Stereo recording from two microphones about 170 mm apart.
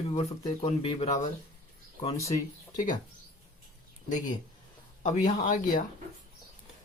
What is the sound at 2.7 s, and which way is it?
Speech, 50° left (ahead or behind).